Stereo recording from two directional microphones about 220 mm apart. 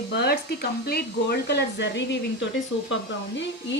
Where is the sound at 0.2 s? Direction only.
45° left (ahead or behind).